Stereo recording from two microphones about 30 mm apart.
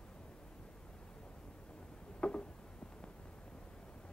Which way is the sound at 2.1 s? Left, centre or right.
Left.